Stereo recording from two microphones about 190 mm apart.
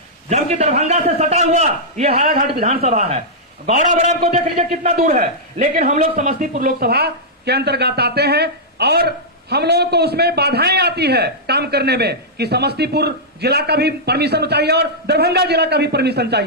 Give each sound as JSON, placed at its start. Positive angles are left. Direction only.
{"t": 0.3, "sound": "a man's voice", "side_deg": -35}